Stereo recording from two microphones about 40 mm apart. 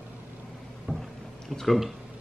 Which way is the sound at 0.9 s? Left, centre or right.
Centre.